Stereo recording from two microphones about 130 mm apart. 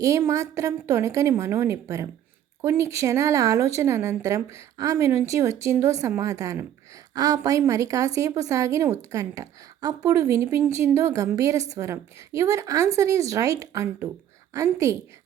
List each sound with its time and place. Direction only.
0.0 s a woman's voice: 25° right (ahead or behind)